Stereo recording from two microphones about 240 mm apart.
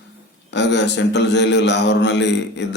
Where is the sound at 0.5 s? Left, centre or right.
Left.